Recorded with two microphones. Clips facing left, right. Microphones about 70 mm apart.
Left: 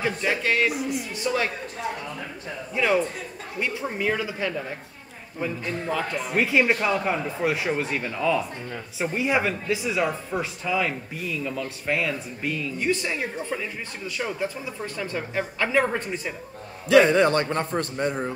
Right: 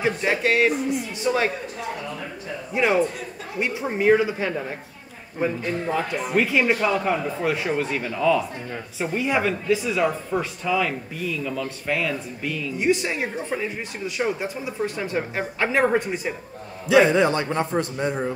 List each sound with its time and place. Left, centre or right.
0.0 s speech: centre
0.7 s speech: centre
1.2 s speech: right
2.7 s speech: right
6.3 s a man's voice: centre
12.7 s speech: centre
15.0 s speech: right
16.8 s a man's voice: left